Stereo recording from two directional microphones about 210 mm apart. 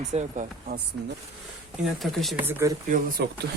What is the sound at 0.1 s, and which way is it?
Speech, 35° right (ahead or behind).